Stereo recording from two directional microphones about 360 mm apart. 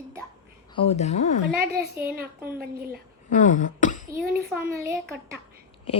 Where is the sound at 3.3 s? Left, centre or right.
Left.